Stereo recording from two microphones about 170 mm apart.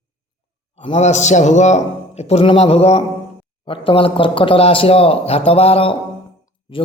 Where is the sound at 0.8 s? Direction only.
40° left (ahead or behind).